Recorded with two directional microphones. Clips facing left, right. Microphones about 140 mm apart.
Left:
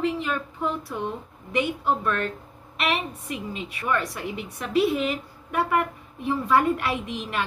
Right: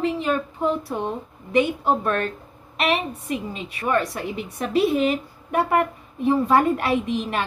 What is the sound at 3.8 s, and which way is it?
A woman's voice, 35° right (ahead or behind).